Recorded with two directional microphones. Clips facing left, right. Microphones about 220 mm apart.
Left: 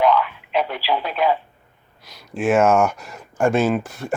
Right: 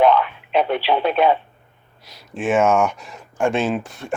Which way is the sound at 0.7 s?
25° right (ahead or behind).